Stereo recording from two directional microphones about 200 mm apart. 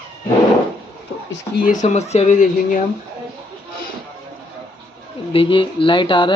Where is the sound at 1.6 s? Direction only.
40° left (ahead or behind).